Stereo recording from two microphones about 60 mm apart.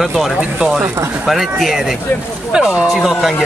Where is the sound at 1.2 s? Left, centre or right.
Centre.